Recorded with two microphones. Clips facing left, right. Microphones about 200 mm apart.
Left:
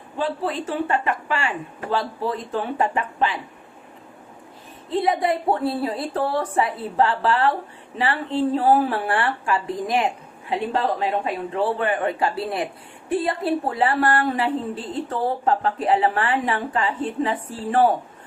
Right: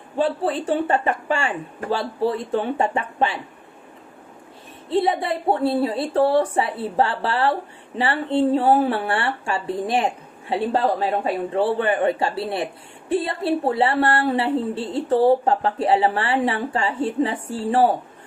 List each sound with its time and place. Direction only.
0.2 s speech: 30° right (ahead or behind)
4.9 s speech: 30° right (ahead or behind)